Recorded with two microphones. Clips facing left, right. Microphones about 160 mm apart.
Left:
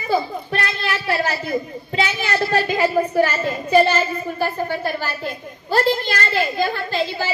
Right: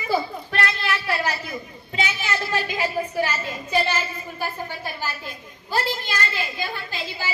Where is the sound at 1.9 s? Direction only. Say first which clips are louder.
Left 5 dB; 35° left (ahead or behind).